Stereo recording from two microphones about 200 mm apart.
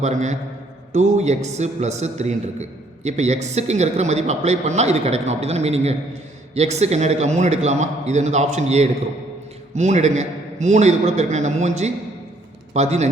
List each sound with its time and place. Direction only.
0.0 s a man's voice: 35° right (ahead or behind)